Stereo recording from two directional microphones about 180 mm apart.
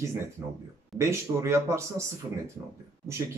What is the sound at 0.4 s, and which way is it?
Speech, 15° right (ahead or behind).